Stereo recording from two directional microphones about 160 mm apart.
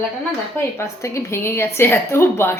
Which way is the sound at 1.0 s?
15° left (ahead or behind).